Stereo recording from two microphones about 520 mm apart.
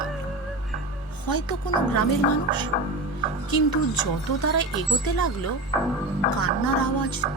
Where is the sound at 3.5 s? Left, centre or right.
Left.